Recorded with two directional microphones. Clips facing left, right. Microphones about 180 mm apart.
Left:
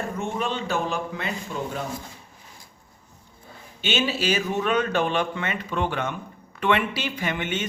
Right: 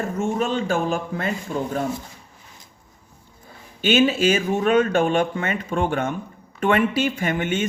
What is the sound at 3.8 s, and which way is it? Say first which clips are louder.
A woman's voice: right 7 dB; 50° right (ahead or behind).